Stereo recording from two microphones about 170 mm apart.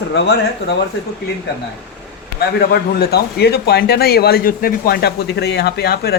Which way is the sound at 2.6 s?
70° left (ahead or behind).